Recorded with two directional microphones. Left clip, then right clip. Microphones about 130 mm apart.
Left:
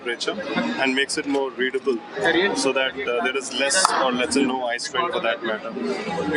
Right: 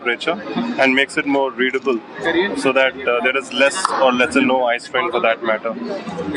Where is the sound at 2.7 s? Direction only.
20° right (ahead or behind).